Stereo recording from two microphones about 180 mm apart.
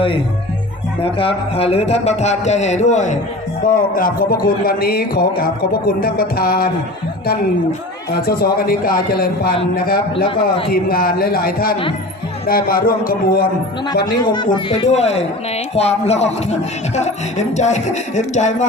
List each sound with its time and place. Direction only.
1.0 s a man's voice: 30° left (ahead or behind); by 6.7 s 55° left (ahead or behind)
8.3 s a man's voice: 55° left (ahead or behind)
14.2 s speech: 25° left (ahead or behind)
14.8 s a man's voice: 35° left (ahead or behind)